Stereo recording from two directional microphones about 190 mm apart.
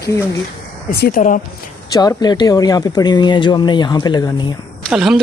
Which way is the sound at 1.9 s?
20° left (ahead or behind).